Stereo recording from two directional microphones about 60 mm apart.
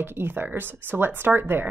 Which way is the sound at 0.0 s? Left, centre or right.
Right.